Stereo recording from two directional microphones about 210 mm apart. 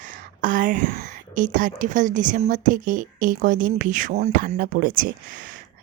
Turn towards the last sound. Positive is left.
turn(degrees=-40)  # may be behind; listen again after turning